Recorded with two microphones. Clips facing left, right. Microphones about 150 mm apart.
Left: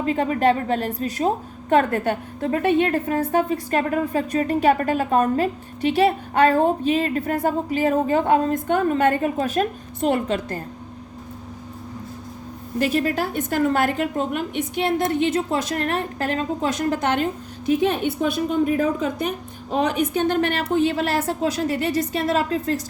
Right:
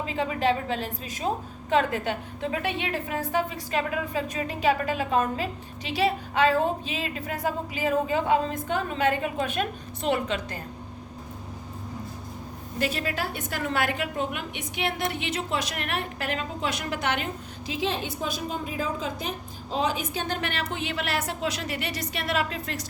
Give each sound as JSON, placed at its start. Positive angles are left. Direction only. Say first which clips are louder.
{"t": 0.0, "sound": "a woman's voice", "louder": "left 6 dB", "side_deg": 45}
{"t": 12.8, "sound": "a woman's voice", "louder": "left 7 dB", "side_deg": 40}
{"t": 17.7, "sound": "a woman's voice", "louder": "left 9 dB", "side_deg": 60}
{"t": 20.1, "sound": "a woman's voice", "louder": "left 9 dB", "side_deg": 50}